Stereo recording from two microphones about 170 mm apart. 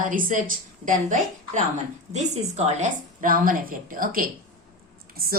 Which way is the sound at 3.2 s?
55° right (ahead or behind).